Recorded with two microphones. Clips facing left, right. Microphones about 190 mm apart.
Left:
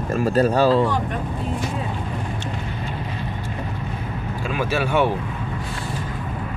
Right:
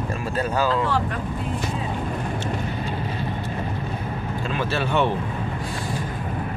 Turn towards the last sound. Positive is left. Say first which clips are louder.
# left 2 dB
turn(degrees=10)  # may be behind; listen again after turning